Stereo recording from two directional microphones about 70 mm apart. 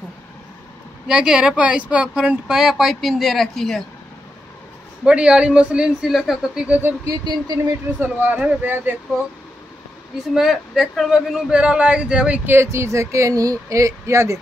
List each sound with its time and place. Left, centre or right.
1.0 s speech: centre
5.0 s speech: centre
6.0 s speech: centre
7.1 s speech: right
8.0 s speech: right
10.3 s speech: centre
12.4 s speech: right